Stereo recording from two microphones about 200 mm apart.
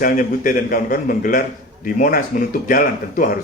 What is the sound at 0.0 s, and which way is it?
A man's voice, 45° left (ahead or behind).